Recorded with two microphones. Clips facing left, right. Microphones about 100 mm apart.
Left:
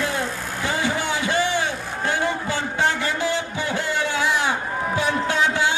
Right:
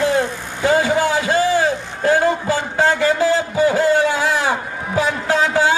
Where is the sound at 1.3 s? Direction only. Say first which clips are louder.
Right 6 dB; 35° right (ahead or behind).